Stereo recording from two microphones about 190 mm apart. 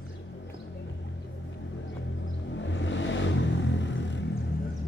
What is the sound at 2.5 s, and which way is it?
Vehicle, 75° left (ahead or behind).